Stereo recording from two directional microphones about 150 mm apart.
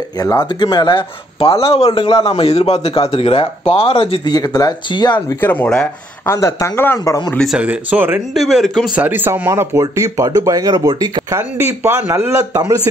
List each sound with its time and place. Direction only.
0.2 s speech: 25° left (ahead or behind)
5.4 s speech: 10° left (ahead or behind)
6.3 s speech: 20° left (ahead or behind)
7.3 s speech: 5° right (ahead or behind)
8.4 s speech: centre (ahead or behind); by 12.8 s 25° right (ahead or behind)